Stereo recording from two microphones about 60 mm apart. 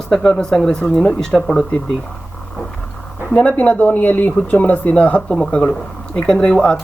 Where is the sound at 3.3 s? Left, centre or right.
Centre.